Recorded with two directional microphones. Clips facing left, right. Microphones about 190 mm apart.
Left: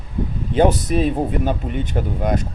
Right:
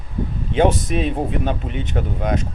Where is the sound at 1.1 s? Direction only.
5° left (ahead or behind).